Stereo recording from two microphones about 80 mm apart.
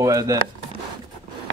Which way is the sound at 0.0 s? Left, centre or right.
Right.